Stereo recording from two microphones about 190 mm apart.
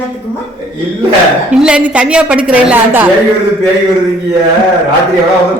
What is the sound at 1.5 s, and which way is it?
A woman's voice, 5° right (ahead or behind).